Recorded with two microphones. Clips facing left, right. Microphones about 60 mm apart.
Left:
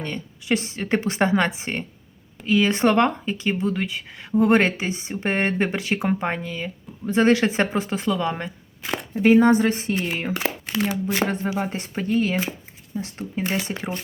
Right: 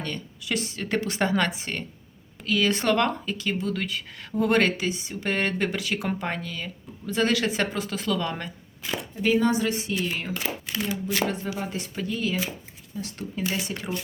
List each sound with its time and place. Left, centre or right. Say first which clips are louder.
0.0 s speech: left 2 dB; left
9.2 s speech: left 7 dB; left